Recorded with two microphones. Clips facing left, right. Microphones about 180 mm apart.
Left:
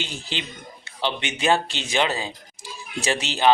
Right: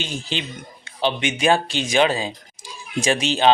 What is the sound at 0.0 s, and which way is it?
Speech, 15° right (ahead or behind).